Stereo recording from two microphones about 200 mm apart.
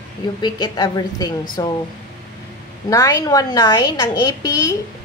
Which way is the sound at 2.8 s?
15° left (ahead or behind).